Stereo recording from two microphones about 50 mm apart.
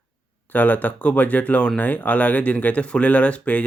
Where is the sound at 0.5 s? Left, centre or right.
Left.